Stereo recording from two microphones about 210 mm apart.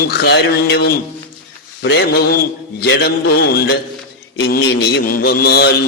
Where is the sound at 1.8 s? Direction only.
55° left (ahead or behind).